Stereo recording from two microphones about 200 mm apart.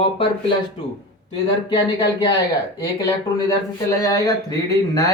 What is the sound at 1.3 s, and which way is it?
A man's voice, 20° left (ahead or behind).